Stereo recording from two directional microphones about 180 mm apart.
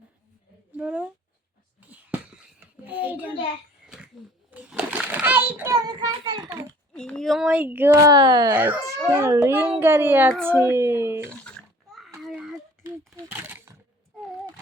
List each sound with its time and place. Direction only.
0.8 s a child's voice: 10° right (ahead or behind)
1.9 s whispering: 10° right (ahead or behind)
2.8 s a child's voice: 10° right (ahead or behind)
3.8 s cough: 5° right (ahead or behind)
4.5 s a sound: 5° right (ahead or behind)
6.9 s speech: 5° left (ahead or behind); by 8.5 s 20° right (ahead or behind)
8.5 s a child's voice: 10° right (ahead or behind)
11.4 s babbling: 5° left (ahead or behind)
12.2 s a sound: centre (ahead or behind)